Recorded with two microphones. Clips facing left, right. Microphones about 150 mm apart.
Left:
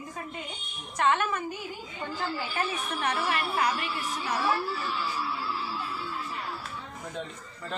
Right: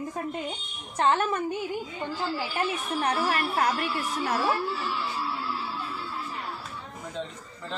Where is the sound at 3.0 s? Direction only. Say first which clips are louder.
Right 3 dB; 35° right (ahead or behind).